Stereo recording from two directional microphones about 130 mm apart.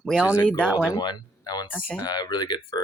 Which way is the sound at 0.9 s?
30° left (ahead or behind).